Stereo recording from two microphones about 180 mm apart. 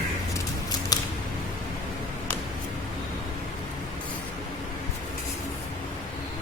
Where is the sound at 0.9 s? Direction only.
20° left (ahead or behind).